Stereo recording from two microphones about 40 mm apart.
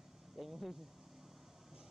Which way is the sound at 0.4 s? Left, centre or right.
Centre.